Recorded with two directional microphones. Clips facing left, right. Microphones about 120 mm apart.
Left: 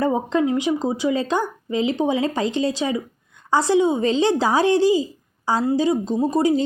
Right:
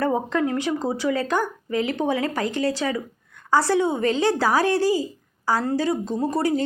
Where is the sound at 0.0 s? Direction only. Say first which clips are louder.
Left 2 dB; 20° left (ahead or behind).